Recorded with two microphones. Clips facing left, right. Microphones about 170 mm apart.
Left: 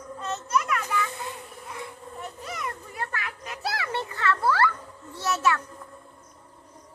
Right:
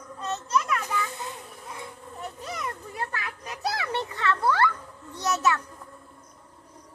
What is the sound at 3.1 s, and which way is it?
Children playing, 20° right (ahead or behind).